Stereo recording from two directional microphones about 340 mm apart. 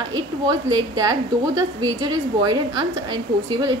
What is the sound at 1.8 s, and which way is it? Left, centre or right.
A woman's voice, centre.